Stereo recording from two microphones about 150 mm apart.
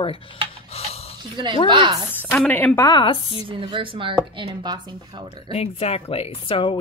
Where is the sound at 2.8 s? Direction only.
30° left (ahead or behind).